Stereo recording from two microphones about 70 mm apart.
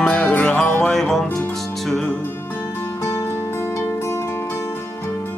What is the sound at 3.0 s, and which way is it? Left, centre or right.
Music, left.